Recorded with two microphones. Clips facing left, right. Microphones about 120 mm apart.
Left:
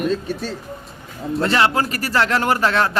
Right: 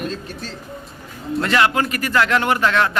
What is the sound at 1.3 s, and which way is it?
Speech, 30° left (ahead or behind).